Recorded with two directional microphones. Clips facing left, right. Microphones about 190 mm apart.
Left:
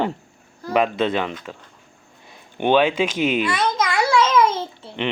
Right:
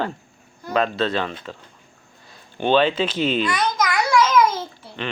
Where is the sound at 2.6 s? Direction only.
15° left (ahead or behind).